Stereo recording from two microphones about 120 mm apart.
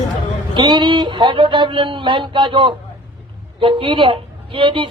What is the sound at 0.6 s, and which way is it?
Speech, 40° right (ahead or behind).